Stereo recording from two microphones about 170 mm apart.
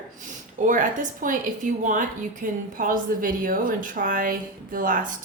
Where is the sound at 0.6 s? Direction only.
50° right (ahead or behind).